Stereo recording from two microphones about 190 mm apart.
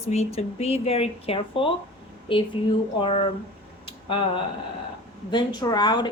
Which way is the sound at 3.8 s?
30° left (ahead or behind).